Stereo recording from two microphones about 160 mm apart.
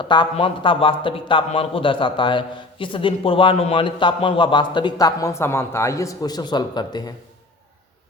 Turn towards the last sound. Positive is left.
turn(degrees=25)  # may be behind; listen again after turning